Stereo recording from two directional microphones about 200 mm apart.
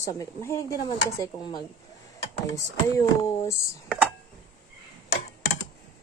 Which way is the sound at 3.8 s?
Centre (ahead or behind).